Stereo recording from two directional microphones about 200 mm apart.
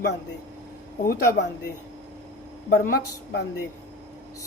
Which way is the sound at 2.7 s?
50° left (ahead or behind).